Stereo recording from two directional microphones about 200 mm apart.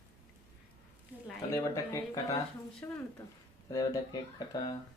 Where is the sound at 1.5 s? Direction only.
15° left (ahead or behind).